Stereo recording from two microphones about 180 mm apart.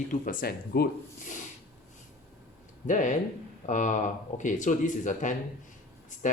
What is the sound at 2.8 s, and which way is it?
Speech, 45° left (ahead or behind).